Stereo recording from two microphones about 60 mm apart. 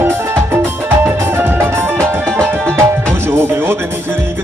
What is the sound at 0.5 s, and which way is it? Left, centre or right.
Music, right.